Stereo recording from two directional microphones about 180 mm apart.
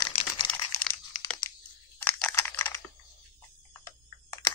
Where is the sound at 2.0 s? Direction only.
15° left (ahead or behind).